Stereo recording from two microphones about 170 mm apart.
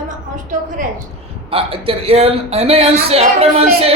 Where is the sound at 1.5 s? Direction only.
35° right (ahead or behind).